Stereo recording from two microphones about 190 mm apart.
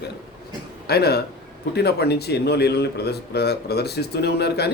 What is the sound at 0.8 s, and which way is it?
A man's voice, 55° left (ahead or behind).